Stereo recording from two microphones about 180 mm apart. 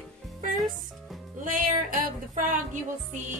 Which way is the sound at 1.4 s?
45° right (ahead or behind).